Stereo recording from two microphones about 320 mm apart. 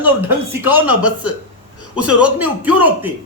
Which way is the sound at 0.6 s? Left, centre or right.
Centre.